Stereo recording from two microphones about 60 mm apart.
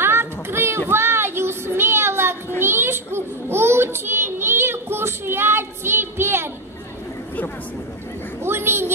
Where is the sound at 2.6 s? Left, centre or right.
Right.